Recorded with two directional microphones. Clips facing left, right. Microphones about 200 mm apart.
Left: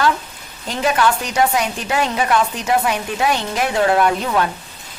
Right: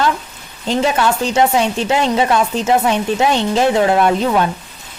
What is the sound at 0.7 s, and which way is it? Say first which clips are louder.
Speech: right 2 dB; 25° right (ahead or behind).